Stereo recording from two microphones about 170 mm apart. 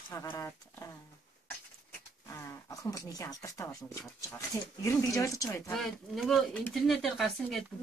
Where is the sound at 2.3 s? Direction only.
20° left (ahead or behind).